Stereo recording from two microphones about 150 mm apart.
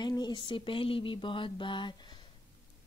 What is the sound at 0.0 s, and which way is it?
A woman's voice, 30° left (ahead or behind).